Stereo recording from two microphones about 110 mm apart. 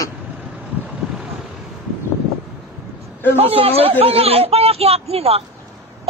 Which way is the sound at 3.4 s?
60° right (ahead or behind).